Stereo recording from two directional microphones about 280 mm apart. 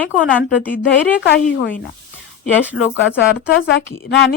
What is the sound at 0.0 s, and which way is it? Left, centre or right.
Speech, centre.